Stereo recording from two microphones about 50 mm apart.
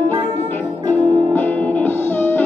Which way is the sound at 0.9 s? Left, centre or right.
Left.